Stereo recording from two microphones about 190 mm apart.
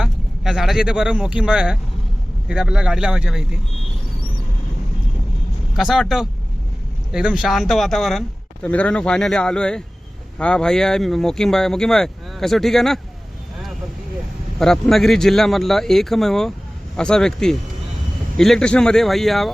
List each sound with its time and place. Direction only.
0.0 s speech: centre (ahead or behind)
5.7 s speech: centre (ahead or behind)
14.6 s speech: centre (ahead or behind)